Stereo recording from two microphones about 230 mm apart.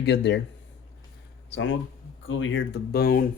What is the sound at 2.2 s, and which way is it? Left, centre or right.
Cutlery, left.